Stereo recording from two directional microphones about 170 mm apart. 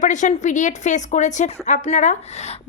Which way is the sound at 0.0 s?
45° left (ahead or behind).